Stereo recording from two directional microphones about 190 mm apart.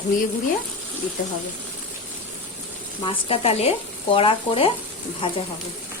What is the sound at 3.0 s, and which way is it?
Speech, 30° left (ahead or behind).